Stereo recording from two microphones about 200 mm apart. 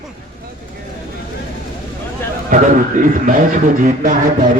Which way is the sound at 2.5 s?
40° right (ahead or behind).